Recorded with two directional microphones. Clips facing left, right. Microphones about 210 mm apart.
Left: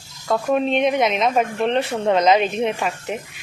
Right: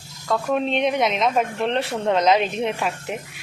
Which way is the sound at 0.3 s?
5° left (ahead or behind).